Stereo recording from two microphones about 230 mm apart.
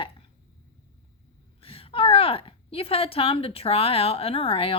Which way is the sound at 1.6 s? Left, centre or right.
Left.